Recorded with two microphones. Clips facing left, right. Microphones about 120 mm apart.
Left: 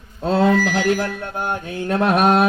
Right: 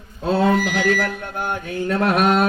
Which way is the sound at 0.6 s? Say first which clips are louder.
Left 1 dB; 35° left (ahead or behind).